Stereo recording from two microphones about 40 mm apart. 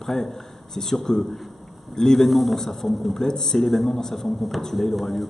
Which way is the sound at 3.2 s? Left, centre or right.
Centre.